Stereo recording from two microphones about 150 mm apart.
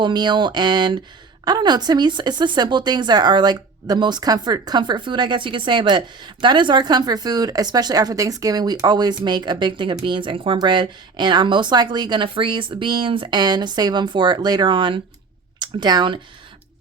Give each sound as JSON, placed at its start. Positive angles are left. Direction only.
{"t": 0.0, "sound": "a woman's voice", "side_deg": -30}